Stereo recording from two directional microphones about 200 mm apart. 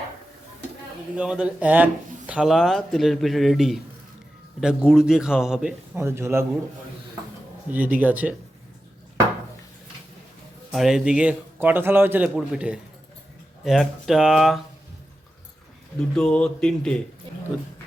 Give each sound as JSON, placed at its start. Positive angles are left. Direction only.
{"t": 1.1, "sound": "speech", "side_deg": -5}
{"t": 4.9, "sound": "speech", "side_deg": -5}
{"t": 7.7, "sound": "a man's voice", "side_deg": -10}
{"t": 10.7, "sound": "a man's voice", "side_deg": 0}
{"t": 16.1, "sound": "speech", "side_deg": 5}